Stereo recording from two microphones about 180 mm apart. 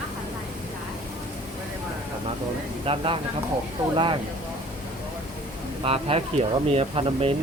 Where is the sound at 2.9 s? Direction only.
30° right (ahead or behind).